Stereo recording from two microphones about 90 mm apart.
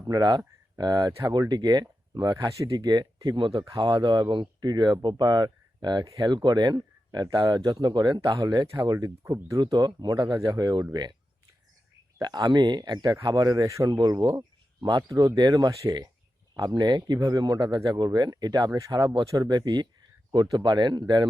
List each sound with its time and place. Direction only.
0.0 s speech: 45° right (ahead or behind)
8.4 s speech: 45° right (ahead or behind)
9.7 s speech: 50° right (ahead or behind)
10.3 s speech: 40° right (ahead or behind)
12.2 s speech: 50° right (ahead or behind); by 15.4 s 35° right (ahead or behind)
15.4 s speech: 50° right (ahead or behind)